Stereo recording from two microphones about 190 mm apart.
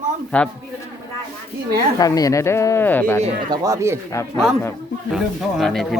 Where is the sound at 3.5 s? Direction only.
15° right (ahead or behind).